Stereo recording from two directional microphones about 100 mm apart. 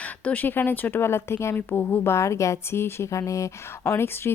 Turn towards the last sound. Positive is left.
turn(degrees=25)  # may be behind; listen again after turning